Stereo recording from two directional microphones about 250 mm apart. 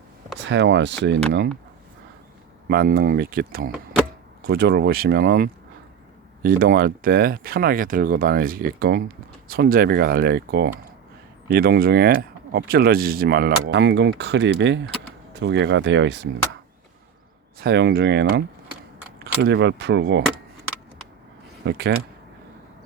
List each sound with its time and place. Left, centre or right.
0.4 s speech: right
2.6 s speech: right
17.6 s speech: right
21.7 s speech: right